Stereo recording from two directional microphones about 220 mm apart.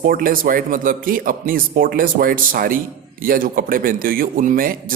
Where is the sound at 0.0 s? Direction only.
40° right (ahead or behind).